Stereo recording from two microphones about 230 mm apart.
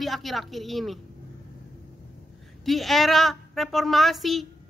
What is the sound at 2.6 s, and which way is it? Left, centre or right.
A woman's voice, centre.